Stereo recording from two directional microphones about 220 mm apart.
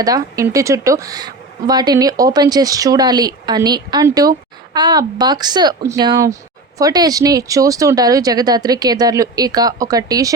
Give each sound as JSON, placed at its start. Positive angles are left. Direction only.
{"t": 0.0, "sound": "speech", "side_deg": -15}